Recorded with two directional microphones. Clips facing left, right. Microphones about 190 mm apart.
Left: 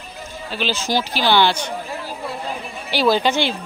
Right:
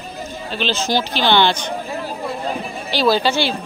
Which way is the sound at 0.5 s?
10° left (ahead or behind).